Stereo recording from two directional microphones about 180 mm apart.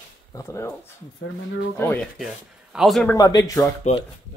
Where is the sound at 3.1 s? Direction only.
20° left (ahead or behind).